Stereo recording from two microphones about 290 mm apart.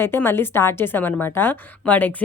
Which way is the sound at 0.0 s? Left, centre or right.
Centre.